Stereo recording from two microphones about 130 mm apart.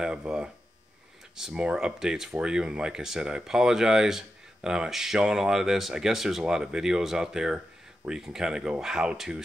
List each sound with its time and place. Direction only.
0.0 s speech: 5° right (ahead or behind)